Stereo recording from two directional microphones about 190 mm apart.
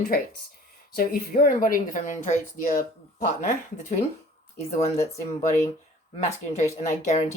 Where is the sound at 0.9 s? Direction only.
50° left (ahead or behind).